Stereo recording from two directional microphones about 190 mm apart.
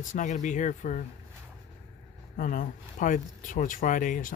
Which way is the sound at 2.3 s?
45° left (ahead or behind).